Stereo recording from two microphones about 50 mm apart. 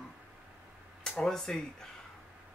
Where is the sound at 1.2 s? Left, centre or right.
Centre.